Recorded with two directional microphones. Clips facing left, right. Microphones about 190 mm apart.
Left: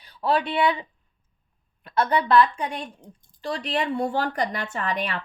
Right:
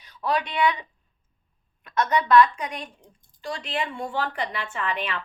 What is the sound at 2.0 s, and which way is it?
Speech, 35° left (ahead or behind).